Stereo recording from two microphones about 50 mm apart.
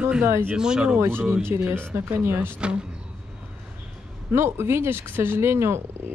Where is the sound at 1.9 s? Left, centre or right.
Right.